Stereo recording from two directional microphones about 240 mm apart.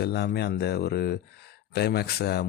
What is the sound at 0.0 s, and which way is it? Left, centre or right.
Speech, left.